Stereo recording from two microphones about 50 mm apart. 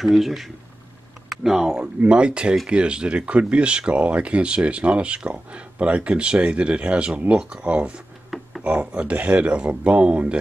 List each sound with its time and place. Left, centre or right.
0.0 s speech: centre
1.8 s speech: right
8.3 s a sound: centre
8.6 s speech: right